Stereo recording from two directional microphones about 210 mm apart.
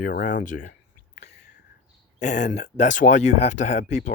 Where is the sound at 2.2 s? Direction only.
35° left (ahead or behind).